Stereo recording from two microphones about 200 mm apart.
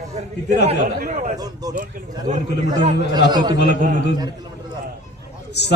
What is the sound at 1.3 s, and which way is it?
Speech, 20° right (ahead or behind).